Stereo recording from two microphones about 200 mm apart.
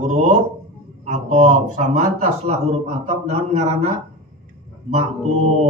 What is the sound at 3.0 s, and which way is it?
Speech, 35° right (ahead or behind).